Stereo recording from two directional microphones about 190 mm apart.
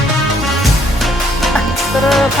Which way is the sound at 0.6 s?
Centre (ahead or behind).